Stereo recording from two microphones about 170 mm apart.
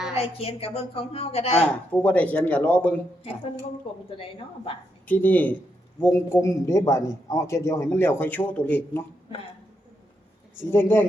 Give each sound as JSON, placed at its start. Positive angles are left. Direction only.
{"t": 0.1, "sound": "a woman's voice", "side_deg": 35}
{"t": 1.5, "sound": "a man's voice", "side_deg": 10}
{"t": 3.9, "sound": "a woman's voice", "side_deg": 30}
{"t": 5.0, "sound": "a man's voice", "side_deg": 10}
{"t": 10.6, "sound": "a man's voice", "side_deg": 10}